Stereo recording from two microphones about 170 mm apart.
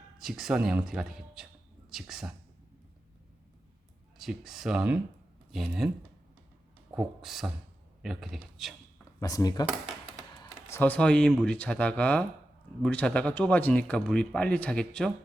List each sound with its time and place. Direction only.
0.2 s speech: centre (ahead or behind)
4.2 s speech: centre (ahead or behind)
6.9 s speech: 5° right (ahead or behind)
9.2 s speech: 20° left (ahead or behind)
10.3 s computer keyboard: 25° left (ahead or behind)
10.8 s speech: 10° left (ahead or behind)